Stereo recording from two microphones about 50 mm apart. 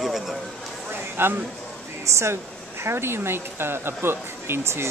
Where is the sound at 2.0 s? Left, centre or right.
Right.